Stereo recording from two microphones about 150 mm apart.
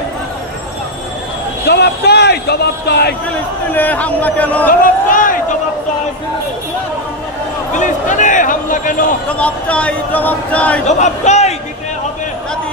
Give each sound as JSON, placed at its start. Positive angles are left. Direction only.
{"t": 1.7, "sound": "a man's voice", "side_deg": 90}
{"t": 3.7, "sound": "speech", "side_deg": 10}
{"t": 4.6, "sound": "a sound", "side_deg": 65}
{"t": 7.7, "sound": "a man's voice", "side_deg": 55}
{"t": 9.3, "sound": "speech", "side_deg": 10}
{"t": 10.9, "sound": "a man's voice", "side_deg": 50}